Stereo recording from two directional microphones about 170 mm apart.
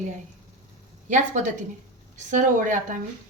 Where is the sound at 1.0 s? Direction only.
45° right (ahead or behind).